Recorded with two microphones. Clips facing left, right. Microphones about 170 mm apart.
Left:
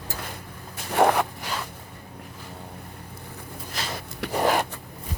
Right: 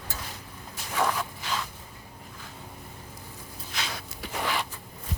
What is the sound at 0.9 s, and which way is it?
Zipper, 65° left (ahead or behind).